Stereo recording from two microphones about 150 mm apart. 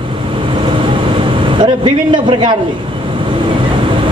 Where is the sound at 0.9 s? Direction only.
35° right (ahead or behind).